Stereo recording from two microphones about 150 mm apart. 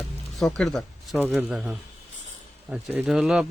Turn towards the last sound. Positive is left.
turn(degrees=-5)  # may be behind; listen again after turning